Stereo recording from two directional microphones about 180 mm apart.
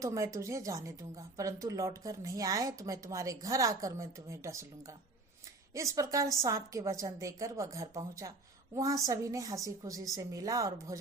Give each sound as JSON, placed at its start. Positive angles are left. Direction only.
{"t": 0.0, "sound": "a woman's voice", "side_deg": -15}